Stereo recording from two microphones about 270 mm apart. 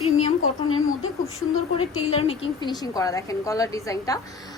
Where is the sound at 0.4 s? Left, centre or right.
Left.